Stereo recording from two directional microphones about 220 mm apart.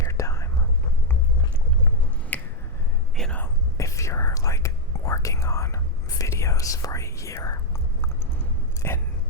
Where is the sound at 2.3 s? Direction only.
5° left (ahead or behind).